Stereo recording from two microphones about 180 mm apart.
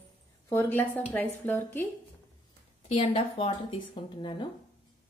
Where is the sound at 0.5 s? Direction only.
10° left (ahead or behind).